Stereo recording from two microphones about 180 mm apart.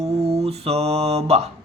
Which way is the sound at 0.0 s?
35° right (ahead or behind).